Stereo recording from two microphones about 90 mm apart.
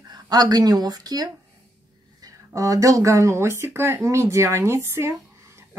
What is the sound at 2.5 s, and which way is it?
Speech, 40° right (ahead or behind).